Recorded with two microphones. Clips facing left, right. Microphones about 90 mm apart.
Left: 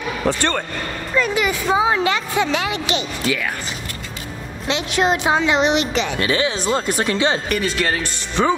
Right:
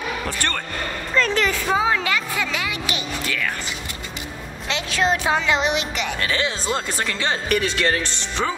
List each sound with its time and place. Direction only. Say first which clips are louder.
0.3 s a woman's voice: left 10 dB; 25° left (ahead or behind)
1.1 s a woman's voice: left 1 dB; 10° left (ahead or behind); by 3.0 s 30° left (ahead or behind)
4.6 s a woman's voice: left 3 dB; 20° left (ahead or behind)
6.2 s speech: left 2 dB; 15° left (ahead or behind)
7.4 s speech: even; centre (ahead or behind)